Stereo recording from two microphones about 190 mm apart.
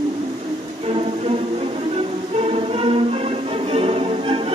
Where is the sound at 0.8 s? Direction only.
30° right (ahead or behind).